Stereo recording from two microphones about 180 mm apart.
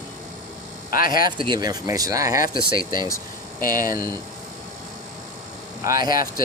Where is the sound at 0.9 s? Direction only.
50° left (ahead or behind).